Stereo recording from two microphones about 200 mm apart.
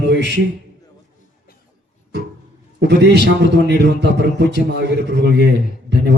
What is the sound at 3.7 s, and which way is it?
A man's voice, 55° right (ahead or behind).